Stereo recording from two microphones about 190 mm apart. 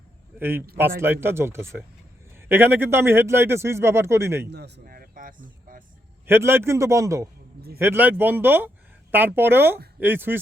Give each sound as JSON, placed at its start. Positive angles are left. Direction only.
{"t": 0.3, "sound": "a man's voice", "side_deg": -10}
{"t": 4.4, "sound": "speech", "side_deg": -60}
{"t": 6.2, "sound": "a man's voice", "side_deg": -10}